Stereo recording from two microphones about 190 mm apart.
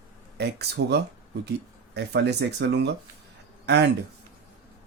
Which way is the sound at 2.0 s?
60° right (ahead or behind).